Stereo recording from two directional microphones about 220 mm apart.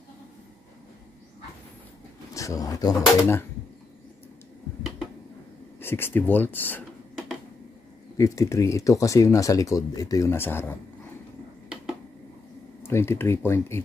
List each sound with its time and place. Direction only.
2.3 s speech: 15° left (ahead or behind)
5.8 s speech: 10° left (ahead or behind)
8.2 s speech: 15° left (ahead or behind)
12.8 s speech: 10° left (ahead or behind)